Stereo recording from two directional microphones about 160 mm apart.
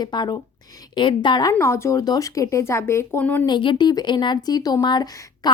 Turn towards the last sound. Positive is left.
turn(degrees=25)  # may be behind; listen again after turning